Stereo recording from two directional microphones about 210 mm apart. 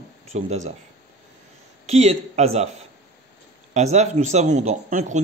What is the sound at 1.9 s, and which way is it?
Speech, 30° right (ahead or behind).